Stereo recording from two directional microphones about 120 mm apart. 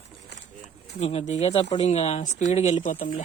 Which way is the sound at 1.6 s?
45° left (ahead or behind).